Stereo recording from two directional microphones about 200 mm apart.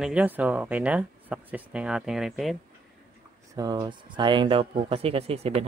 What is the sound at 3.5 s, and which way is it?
Speech, 20° right (ahead or behind).